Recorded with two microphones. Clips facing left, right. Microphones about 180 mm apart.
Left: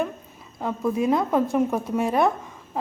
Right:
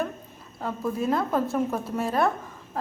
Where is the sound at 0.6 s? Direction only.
15° left (ahead or behind).